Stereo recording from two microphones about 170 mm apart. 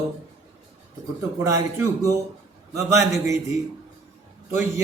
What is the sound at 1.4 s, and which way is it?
A man's voice, 20° right (ahead or behind).